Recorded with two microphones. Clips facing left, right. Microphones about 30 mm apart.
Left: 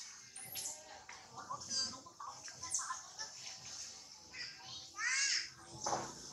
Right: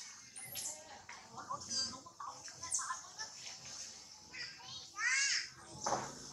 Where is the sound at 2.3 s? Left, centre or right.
Centre.